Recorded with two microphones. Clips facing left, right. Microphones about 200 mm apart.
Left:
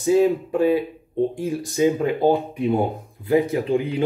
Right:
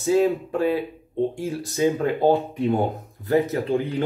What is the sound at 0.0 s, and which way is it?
Speech, 15° left (ahead or behind).